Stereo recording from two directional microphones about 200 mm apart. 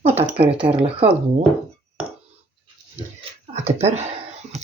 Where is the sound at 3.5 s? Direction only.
35° right (ahead or behind).